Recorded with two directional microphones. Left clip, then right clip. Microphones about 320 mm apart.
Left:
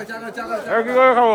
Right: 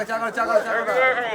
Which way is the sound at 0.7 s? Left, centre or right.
Centre.